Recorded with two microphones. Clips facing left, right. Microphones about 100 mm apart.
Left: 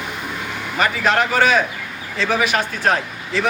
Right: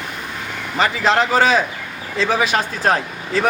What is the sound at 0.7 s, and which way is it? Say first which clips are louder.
A man's voice: right 1 dB; 30° right (ahead or behind).